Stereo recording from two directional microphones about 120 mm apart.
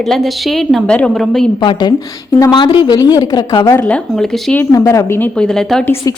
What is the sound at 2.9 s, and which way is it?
Speech, 30° left (ahead or behind).